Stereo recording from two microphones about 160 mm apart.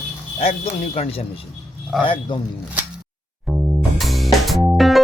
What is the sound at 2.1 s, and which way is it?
Speech, 30° left (ahead or behind).